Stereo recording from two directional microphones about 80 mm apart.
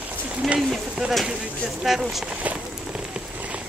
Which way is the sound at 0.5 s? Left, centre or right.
Centre.